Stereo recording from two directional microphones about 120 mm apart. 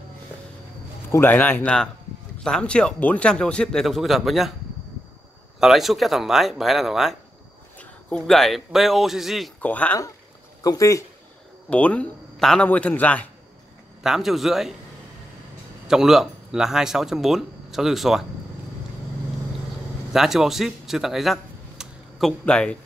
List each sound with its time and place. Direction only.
1.1 s speech: 15° left (ahead or behind); by 4.5 s centre (ahead or behind)
5.6 s speech: centre (ahead or behind)
7.7 s a man's voice: 10° left (ahead or behind)
9.6 s speech: 15° left (ahead or behind)
10.6 s speech: 30° left (ahead or behind)
11.7 s speech: 10° left (ahead or behind)
14.0 s speech: 5° right (ahead or behind)
15.9 s speech: 5° right (ahead or behind)
20.1 s speech: 5° right (ahead or behind)